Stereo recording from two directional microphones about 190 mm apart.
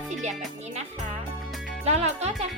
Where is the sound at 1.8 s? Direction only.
35° right (ahead or behind).